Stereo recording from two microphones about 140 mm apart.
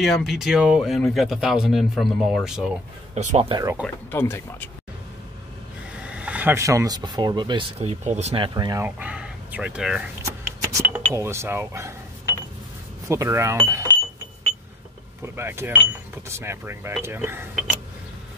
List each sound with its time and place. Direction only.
0.0 s speech: centre (ahead or behind)
3.2 s speech: 60° right (ahead or behind)
3.8 s speech: 15° left (ahead or behind)
5.9 s speech: 10° right (ahead or behind); by 7.6 s 35° right (ahead or behind)
7.8 s speech: 55° right (ahead or behind)
8.5 s speech: 25° right (ahead or behind)
8.8 s speech: 10° right (ahead or behind)
10.2 s a sound: 20° right (ahead or behind)
13.1 s speech: 20° right (ahead or behind)
15.2 s speech: 15° right (ahead or behind)